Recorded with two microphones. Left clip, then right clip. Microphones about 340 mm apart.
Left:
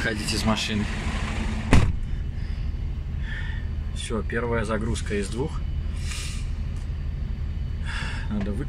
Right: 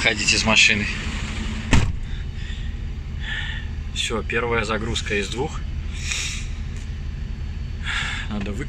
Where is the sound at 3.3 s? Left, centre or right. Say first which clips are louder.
Right 8 dB; centre.